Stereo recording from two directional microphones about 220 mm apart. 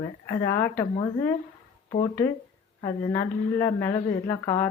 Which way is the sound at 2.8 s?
15° left (ahead or behind).